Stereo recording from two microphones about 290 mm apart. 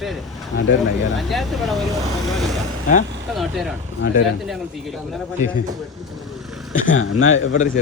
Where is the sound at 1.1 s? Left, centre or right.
Centre.